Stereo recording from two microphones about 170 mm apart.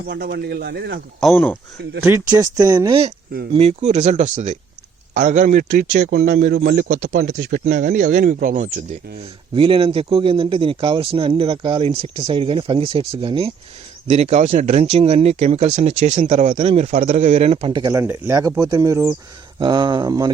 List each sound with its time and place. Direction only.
0.1 s speech: 65° right (ahead or behind)
2.0 s speech: 15° right (ahead or behind); by 6.1 s 50° right (ahead or behind)
6.1 s speech: 70° right (ahead or behind)
6.4 s speech: 55° right (ahead or behind)
7.3 s speech: 75° right (ahead or behind)
7.7 s speech: 45° right (ahead or behind)
9.6 s a man's voice: 35° right (ahead or behind)
18.0 s speech: 15° right (ahead or behind)